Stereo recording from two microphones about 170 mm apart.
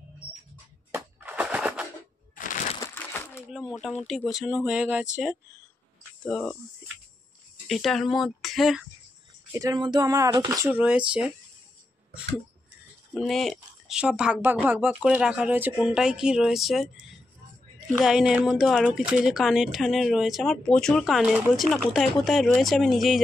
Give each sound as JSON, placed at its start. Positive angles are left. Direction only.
{"t": 0.9, "sound": "a sound", "side_deg": -10}
{"t": 2.3, "sound": "a sound", "side_deg": 50}
{"t": 2.8, "sound": "crumpling", "side_deg": 10}
{"t": 4.0, "sound": "speech", "side_deg": 0}
{"t": 7.6, "sound": "speech", "side_deg": 0}
{"t": 9.5, "sound": "speech", "side_deg": -20}
{"t": 10.7, "sound": "speech", "side_deg": -10}
{"t": 13.1, "sound": "speech", "side_deg": 0}
{"t": 17.9, "sound": "speech", "side_deg": -5}